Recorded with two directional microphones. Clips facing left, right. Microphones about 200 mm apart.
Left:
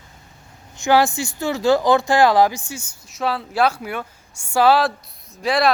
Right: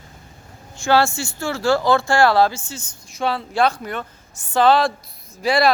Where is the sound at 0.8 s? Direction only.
15° left (ahead or behind).